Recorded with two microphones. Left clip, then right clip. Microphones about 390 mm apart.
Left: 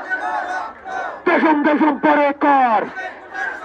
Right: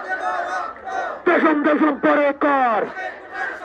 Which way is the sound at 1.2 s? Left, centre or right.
Centre.